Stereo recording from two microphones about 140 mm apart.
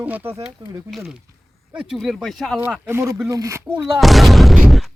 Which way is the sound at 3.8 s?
Centre (ahead or behind).